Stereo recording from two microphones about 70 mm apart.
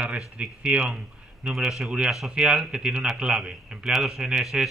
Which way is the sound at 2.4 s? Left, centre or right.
Centre.